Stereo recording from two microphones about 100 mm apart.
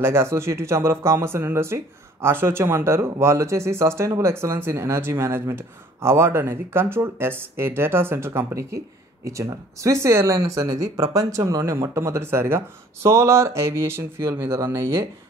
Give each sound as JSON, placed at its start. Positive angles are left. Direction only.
{"t": 0.0, "sound": "speech", "side_deg": -25}